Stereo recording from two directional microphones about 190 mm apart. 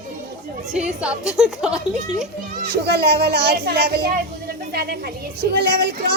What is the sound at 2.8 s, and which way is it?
Speech, 55° right (ahead or behind).